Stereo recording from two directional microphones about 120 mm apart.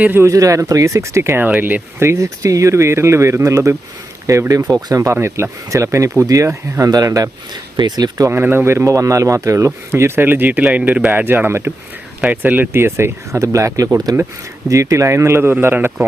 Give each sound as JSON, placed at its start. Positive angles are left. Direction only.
{"t": 0.0, "sound": "speech", "side_deg": -20}
{"t": 8.3, "sound": "speech", "side_deg": -20}